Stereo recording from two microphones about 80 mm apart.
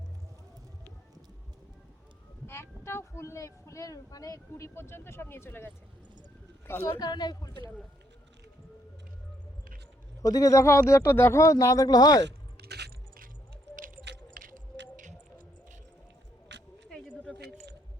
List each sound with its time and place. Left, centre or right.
2.5 s speech: left
6.8 s speech: left
10.2 s speech: left